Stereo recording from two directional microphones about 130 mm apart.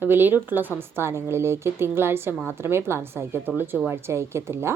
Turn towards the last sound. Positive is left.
turn(degrees=-20)  # may be behind; listen again after turning